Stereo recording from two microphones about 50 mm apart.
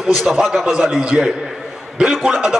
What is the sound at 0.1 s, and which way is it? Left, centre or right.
Speech, centre.